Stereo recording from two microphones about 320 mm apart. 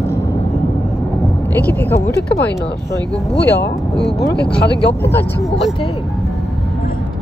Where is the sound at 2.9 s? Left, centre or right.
Centre.